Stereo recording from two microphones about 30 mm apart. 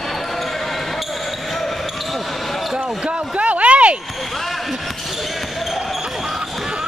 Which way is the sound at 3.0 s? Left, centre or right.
Right.